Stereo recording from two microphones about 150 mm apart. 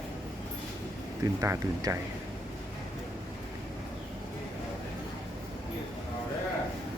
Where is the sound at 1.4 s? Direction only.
20° right (ahead or behind).